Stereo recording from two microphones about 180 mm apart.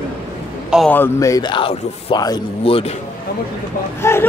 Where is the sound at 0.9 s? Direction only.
15° left (ahead or behind); by 2.9 s 30° left (ahead or behind).